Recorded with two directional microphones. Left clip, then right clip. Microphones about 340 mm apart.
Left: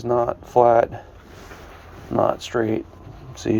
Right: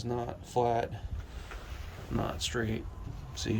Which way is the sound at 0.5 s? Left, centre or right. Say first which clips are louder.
Left 14 dB; centre.